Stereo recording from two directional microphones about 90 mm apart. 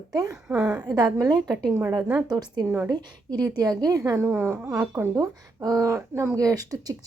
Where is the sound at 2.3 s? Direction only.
50° right (ahead or behind).